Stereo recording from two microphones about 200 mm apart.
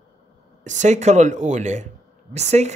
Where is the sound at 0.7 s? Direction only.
35° right (ahead or behind).